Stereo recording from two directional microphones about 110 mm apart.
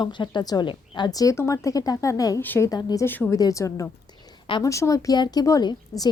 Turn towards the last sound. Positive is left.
turn(degrees=35)  # may be behind; listen again after turning